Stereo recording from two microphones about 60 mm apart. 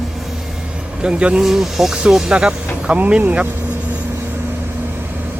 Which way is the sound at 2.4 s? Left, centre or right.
Centre.